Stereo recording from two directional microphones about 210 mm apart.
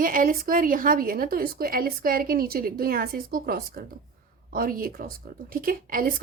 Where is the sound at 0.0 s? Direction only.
40° right (ahead or behind).